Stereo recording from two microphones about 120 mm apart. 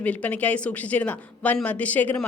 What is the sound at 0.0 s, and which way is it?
A woman's voice, 10° left (ahead or behind).